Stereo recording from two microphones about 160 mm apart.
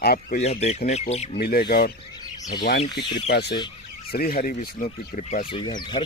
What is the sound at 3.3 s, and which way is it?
Speech, 90° left.